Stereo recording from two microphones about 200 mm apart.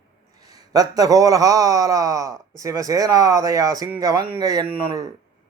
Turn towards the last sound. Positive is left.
turn(degrees=-15)  # may be behind; listen again after turning